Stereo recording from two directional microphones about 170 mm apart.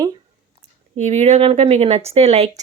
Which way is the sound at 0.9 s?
40° right (ahead or behind).